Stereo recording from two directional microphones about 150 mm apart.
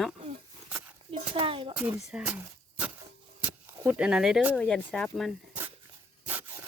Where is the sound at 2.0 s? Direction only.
5° right (ahead or behind).